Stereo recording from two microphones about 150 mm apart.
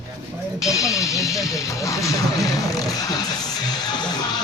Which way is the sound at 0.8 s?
20° left (ahead or behind).